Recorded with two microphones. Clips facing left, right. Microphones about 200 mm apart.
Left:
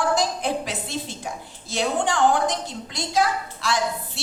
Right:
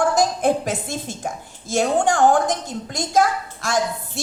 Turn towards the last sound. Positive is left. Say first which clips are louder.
# right 3 dB
turn(degrees=-45)  # may be behind; listen again after turning